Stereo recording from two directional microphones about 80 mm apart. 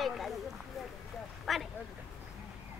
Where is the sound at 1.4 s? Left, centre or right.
Centre.